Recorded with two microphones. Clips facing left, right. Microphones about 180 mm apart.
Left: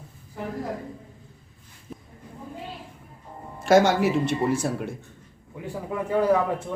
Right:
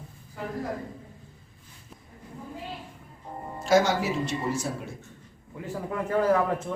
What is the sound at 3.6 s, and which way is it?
Speech, 60° left (ahead or behind).